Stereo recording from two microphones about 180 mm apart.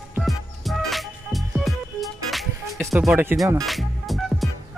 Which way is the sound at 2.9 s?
10° right (ahead or behind).